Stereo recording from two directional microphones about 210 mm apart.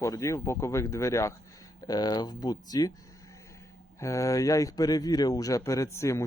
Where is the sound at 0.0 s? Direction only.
15° left (ahead or behind).